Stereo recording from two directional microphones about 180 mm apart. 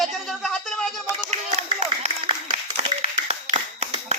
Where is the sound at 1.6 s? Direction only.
35° right (ahead or behind).